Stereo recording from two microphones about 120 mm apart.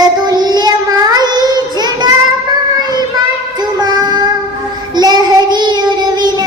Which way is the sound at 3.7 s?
35° right (ahead or behind).